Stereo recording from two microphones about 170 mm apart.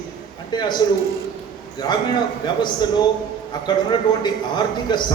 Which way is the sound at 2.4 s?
25° left (ahead or behind).